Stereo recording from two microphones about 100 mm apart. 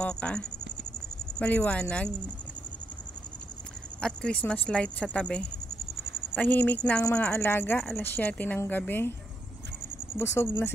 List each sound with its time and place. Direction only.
0.0 s speech: 10° left (ahead or behind)
4.0 s speech: 10° left (ahead or behind)
10.1 s speech: 25° left (ahead or behind)